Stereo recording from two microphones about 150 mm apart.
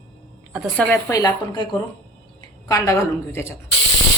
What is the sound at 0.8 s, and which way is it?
Speech, 15° left (ahead or behind).